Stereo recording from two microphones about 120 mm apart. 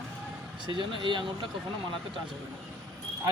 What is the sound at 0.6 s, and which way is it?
Speech, 45° right (ahead or behind).